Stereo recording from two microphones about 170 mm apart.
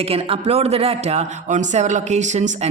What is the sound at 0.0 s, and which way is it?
Speech, 35° right (ahead or behind).